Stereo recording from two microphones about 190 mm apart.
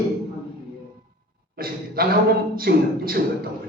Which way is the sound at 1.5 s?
50° right (ahead or behind).